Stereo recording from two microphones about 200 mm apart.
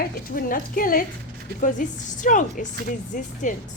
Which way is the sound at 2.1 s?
40° left (ahead or behind).